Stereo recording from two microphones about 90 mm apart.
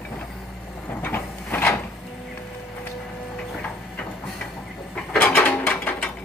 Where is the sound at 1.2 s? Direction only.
30° left (ahead or behind).